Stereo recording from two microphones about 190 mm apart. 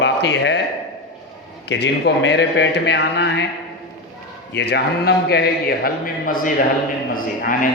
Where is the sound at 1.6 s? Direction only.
65° left (ahead or behind).